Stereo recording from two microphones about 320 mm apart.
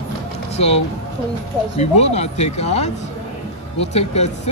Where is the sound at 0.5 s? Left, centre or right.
Centre.